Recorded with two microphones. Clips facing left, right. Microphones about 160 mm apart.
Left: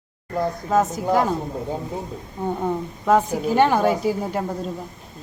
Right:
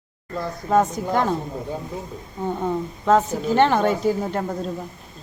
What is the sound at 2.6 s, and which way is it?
A woman's voice, 10° left (ahead or behind).